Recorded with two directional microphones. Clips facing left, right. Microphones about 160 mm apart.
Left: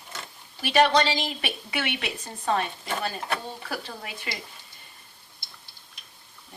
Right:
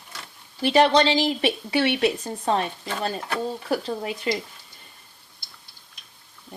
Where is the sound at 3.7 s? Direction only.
30° right (ahead or behind).